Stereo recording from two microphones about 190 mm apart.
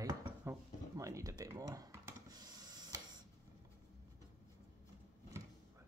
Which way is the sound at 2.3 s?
20° right (ahead or behind).